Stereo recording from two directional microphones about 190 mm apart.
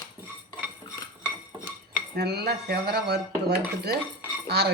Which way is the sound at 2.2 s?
60° right (ahead or behind).